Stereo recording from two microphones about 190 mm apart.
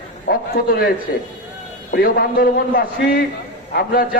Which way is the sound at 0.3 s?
55° left (ahead or behind).